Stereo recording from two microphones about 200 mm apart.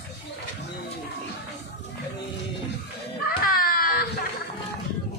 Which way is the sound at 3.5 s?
45° left (ahead or behind).